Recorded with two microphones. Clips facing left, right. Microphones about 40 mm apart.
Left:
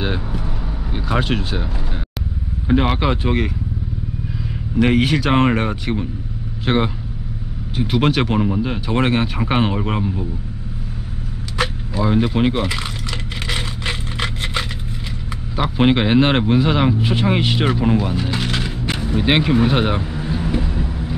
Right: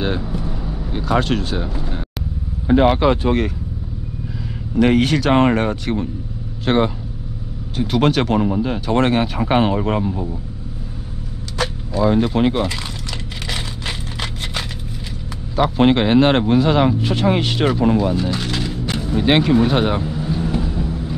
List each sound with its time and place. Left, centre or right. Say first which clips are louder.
0.3 s vehicle: right 1 dB; left
0.9 s speech: right 2 dB; centre
2.7 s speech: right 4 dB; centre
4.7 s speech: right 1 dB; centre
11.5 s vehicle: even; centre
12.0 s speech: right 2 dB; centre
13.5 s scrape: left 2 dB; centre
15.5 s speech: right 2 dB; centre
19.1 s vehicle: right 2 dB; centre